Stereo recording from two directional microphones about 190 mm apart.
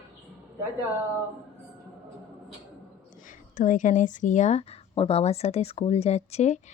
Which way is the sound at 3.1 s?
45° left (ahead or behind).